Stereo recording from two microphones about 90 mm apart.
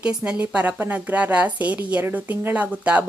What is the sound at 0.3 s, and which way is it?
A woman's voice, 15° right (ahead or behind).